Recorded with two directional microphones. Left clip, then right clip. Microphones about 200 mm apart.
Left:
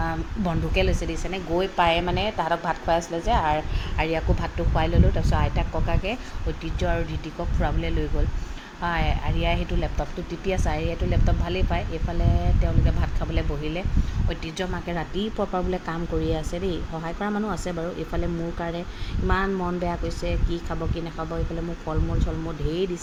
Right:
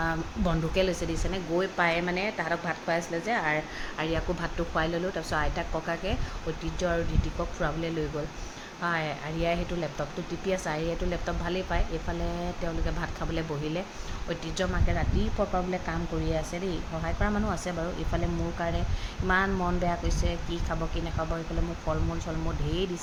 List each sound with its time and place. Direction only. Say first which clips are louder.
0.0 s speech: left 1 dB; centre (ahead or behind)
13.0 s speech: left 2 dB; 5° right (ahead or behind)
19.3 s speech: left 1 dB; centre (ahead or behind)